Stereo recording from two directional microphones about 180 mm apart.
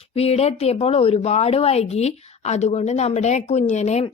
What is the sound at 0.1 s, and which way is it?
Speech, 35° left (ahead or behind).